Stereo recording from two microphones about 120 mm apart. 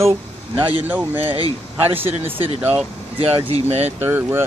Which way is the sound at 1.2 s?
50° right (ahead or behind).